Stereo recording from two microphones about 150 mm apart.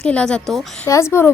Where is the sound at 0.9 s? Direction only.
20° left (ahead or behind).